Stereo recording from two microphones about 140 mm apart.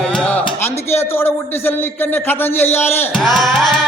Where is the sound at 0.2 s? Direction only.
10° left (ahead or behind).